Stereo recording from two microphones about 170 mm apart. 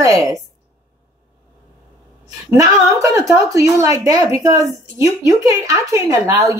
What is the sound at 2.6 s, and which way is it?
A woman's voice, 20° right (ahead or behind).